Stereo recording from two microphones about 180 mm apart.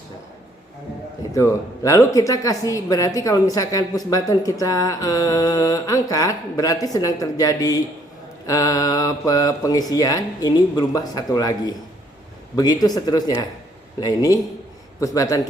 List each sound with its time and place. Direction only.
1.3 s speech: 15° left (ahead or behind)